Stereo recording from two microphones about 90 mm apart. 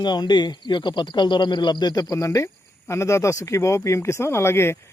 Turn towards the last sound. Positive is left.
turn(degrees=30)  # may be behind; listen again after turning